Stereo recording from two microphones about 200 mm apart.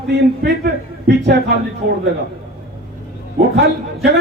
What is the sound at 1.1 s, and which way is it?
Speech, 60° right (ahead or behind).